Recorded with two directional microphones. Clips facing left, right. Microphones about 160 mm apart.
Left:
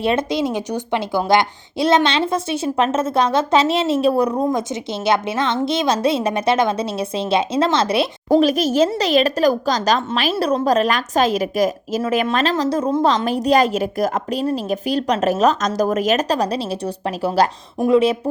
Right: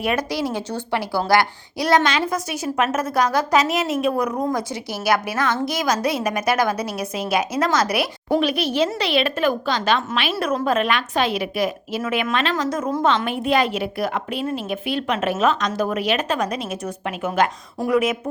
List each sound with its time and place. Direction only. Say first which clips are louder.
0.0 s a woman's voice: left 4 dB; 25° left (ahead or behind)
8.3 s a woman's voice: left 6 dB; 40° left (ahead or behind)